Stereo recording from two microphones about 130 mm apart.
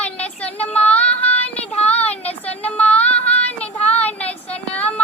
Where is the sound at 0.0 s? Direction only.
10° left (ahead or behind).